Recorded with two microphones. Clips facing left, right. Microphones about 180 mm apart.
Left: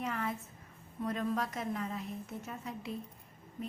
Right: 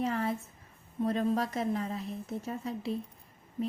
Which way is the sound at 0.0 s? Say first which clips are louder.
Right 6 dB; 35° right (ahead or behind).